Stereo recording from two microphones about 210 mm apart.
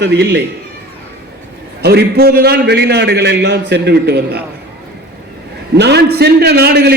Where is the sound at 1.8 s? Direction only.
50° right (ahead or behind).